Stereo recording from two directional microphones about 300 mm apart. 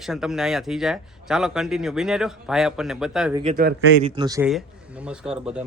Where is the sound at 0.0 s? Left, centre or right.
Centre.